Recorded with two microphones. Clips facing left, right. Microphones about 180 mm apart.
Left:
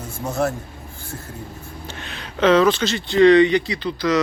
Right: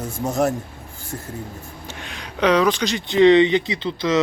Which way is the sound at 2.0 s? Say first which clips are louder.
Left 1 dB; 10° right (ahead or behind).